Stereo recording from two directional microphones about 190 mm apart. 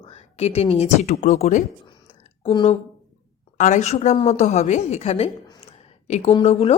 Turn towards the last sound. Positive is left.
turn(degrees=30)  # may be behind; listen again after turning